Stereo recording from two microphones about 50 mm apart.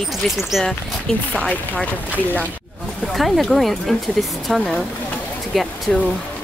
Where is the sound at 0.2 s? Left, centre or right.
Centre.